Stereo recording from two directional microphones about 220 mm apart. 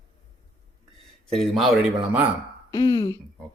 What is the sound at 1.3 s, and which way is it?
Speech, centre (ahead or behind).